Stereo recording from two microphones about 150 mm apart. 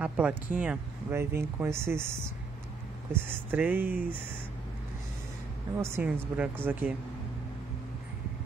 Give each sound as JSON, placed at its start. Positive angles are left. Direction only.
{"t": 0.0, "sound": "speech", "side_deg": -10}
{"t": 5.8, "sound": "speech", "side_deg": -15}